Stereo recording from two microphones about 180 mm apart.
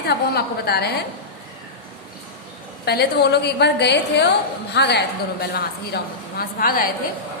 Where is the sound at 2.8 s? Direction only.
65° left (ahead or behind).